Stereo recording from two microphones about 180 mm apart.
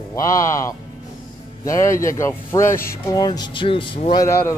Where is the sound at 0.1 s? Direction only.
15° left (ahead or behind).